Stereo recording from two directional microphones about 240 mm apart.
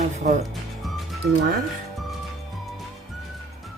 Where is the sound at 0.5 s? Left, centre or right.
Centre.